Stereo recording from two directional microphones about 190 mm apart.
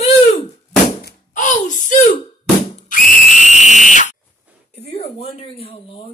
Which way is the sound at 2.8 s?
45° left (ahead or behind).